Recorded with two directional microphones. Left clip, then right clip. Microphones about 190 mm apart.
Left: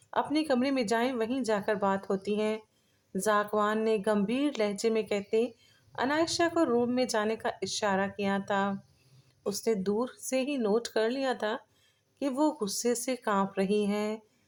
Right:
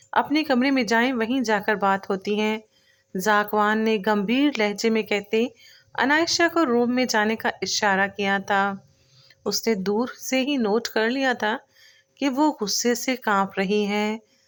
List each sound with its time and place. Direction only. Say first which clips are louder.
0.1 s speech: right 7 dB; 20° right (ahead or behind)